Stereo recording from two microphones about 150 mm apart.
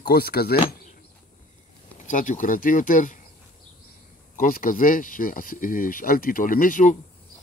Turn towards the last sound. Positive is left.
turn(degrees=60)  # may be behind; listen again after turning